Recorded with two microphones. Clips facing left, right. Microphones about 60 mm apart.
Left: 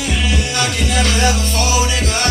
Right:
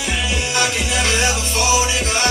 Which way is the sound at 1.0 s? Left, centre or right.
Right.